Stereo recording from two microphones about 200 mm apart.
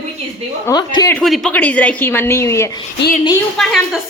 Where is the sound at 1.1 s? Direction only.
Centre (ahead or behind).